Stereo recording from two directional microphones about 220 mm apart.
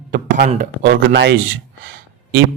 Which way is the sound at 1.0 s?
55° right (ahead or behind).